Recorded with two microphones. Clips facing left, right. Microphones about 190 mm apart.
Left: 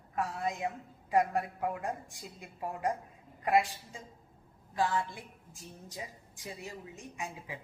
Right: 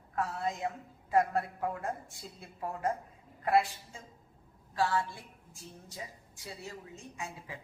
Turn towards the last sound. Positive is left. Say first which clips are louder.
# left 1 dB
turn(degrees=20)  # may be behind; listen again after turning